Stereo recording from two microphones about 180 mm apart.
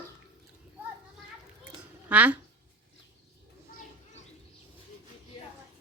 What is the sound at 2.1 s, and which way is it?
Speech, 10° right (ahead or behind).